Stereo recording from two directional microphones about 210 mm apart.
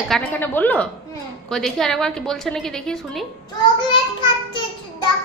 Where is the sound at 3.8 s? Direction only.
20° left (ahead or behind).